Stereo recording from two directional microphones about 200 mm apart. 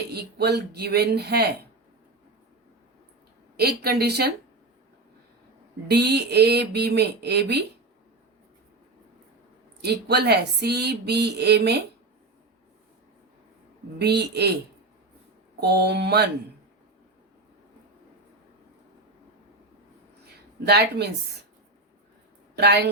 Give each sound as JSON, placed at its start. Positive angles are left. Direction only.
{"t": 0.1, "sound": "speech", "side_deg": -55}
{"t": 3.6, "sound": "speech", "side_deg": -50}
{"t": 5.9, "sound": "speech", "side_deg": -55}
{"t": 9.8, "sound": "speech", "side_deg": -55}
{"t": 14.0, "sound": "speech", "side_deg": -55}
{"t": 15.6, "sound": "speech", "side_deg": -55}
{"t": 20.7, "sound": "speech", "side_deg": -55}
{"t": 22.5, "sound": "speech", "side_deg": -55}